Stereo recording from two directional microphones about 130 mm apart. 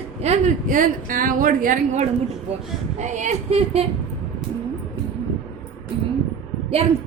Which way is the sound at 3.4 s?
50° right (ahead or behind).